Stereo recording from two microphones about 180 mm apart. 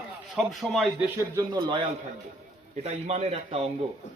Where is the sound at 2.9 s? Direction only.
35° right (ahead or behind).